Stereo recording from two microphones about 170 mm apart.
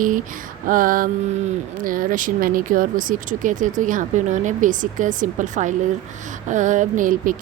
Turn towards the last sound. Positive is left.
turn(degrees=-50)  # may be behind; listen again after turning